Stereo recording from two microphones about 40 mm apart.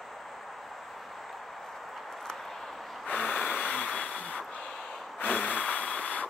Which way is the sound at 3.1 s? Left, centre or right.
Left.